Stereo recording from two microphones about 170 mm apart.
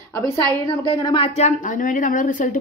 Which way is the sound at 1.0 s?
30° left (ahead or behind).